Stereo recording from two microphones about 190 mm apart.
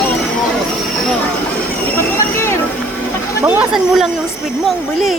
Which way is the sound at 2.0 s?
10° left (ahead or behind).